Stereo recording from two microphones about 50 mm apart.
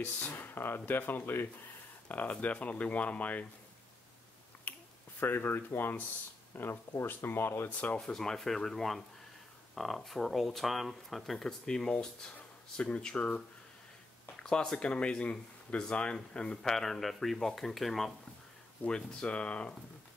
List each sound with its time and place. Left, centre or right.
0.3 s speech: left
2.0 s speech: left
4.7 s finger snapping: left
5.2 s speech: left
8.0 s speech: centre; by 13.4 s left
14.4 s speech: centre
16.7 s speech: centre
18.9 s speech: centre